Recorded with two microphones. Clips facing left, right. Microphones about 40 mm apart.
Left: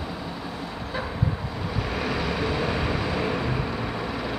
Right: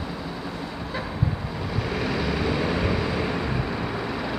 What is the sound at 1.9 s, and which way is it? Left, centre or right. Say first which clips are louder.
Vehicle: right 1 dB; centre.